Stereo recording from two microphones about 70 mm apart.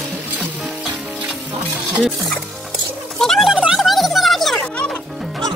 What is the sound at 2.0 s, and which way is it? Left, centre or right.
Music, centre.